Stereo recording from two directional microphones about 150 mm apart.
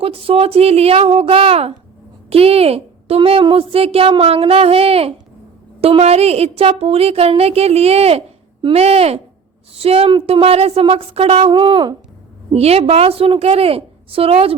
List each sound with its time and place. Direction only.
0.0 s a woman's voice: 40° right (ahead or behind)